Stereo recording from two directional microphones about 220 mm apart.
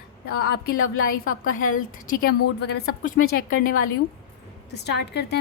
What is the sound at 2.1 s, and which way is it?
A woman's voice, 40° left (ahead or behind).